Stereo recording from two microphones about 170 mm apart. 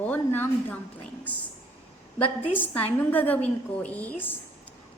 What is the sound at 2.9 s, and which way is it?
A woman's voice, 10° left (ahead or behind).